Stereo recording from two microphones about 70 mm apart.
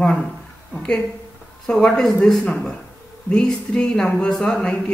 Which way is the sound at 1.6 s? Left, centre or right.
Centre.